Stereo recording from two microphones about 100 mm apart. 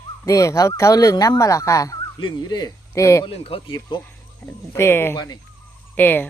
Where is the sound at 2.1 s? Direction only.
45° left (ahead or behind).